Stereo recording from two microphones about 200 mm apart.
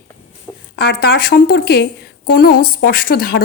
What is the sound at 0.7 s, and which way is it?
A woman's voice, 50° left (ahead or behind).